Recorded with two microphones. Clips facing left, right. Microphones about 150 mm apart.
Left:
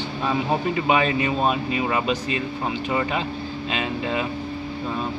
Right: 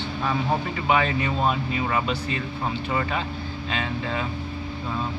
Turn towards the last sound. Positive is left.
turn(degrees=20)  # may be behind; listen again after turning